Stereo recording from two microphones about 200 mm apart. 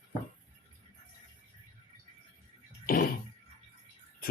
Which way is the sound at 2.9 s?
45° left (ahead or behind).